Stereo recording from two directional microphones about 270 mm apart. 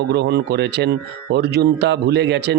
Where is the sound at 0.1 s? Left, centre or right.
Right.